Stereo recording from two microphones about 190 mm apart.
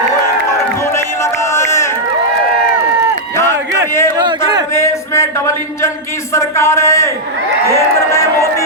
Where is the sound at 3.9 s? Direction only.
15° left (ahead or behind).